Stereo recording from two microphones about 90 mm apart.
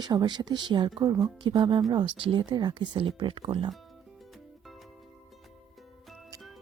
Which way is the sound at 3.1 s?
70° right (ahead or behind).